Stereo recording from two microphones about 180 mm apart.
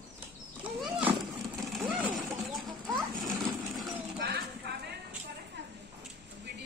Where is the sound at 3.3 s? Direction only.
Centre (ahead or behind).